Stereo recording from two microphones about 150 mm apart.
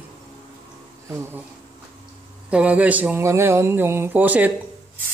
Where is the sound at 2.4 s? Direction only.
10° right (ahead or behind).